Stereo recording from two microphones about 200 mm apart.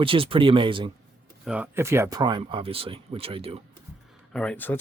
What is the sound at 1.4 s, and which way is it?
Speech, 5° right (ahead or behind).